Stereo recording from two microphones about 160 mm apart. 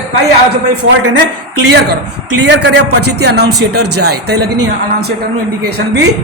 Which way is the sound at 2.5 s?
90° right.